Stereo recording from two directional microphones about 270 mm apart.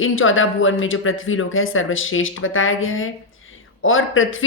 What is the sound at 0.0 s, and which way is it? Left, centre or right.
Speech, left.